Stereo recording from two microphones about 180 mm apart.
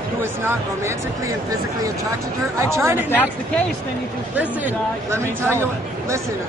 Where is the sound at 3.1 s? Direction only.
10° left (ahead or behind).